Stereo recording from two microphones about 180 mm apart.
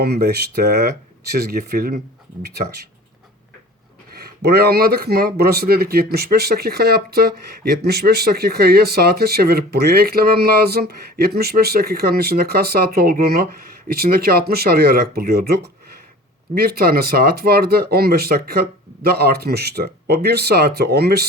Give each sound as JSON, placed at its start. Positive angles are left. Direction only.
{"t": 0.0, "sound": "speech", "side_deg": -60}
{"t": 4.1, "sound": "speech", "side_deg": -60}